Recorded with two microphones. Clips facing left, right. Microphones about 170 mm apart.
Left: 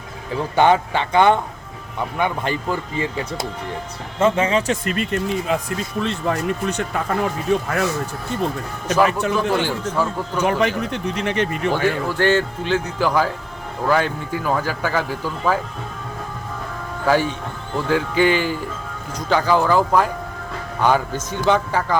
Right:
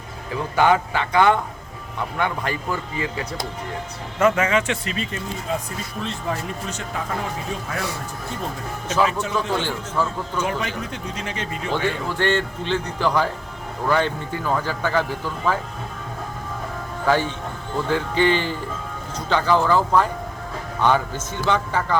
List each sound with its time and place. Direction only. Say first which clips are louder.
0.5 s speech: left 2 dB; 25° left (ahead or behind)
4.2 s speech: left 1 dB; 30° left (ahead or behind)
4.9 s speech: left 7 dB; 60° left (ahead or behind)
8.9 s speech: left 4 dB; 60° left (ahead or behind)
10.0 s speech: left 1 dB; 10° left (ahead or behind)
10.4 s speech: left 9 dB; 65° left (ahead or behind)
11.7 s speech: left 4 dB; 5° left (ahead or behind)
17.1 s speech: left 2 dB; 10° left (ahead or behind)